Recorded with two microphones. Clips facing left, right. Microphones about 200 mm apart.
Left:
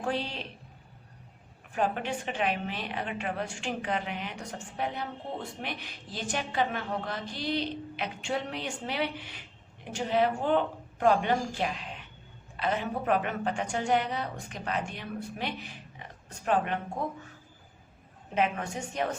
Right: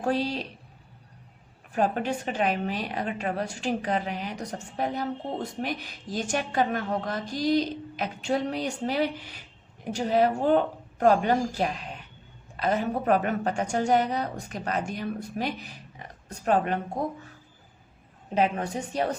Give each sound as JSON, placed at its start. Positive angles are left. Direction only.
{"t": 0.0, "sound": "a woman's voice", "side_deg": -40}
{"t": 1.7, "sound": "a woman's voice", "side_deg": -40}
{"t": 18.3, "sound": "a woman's voice", "side_deg": -35}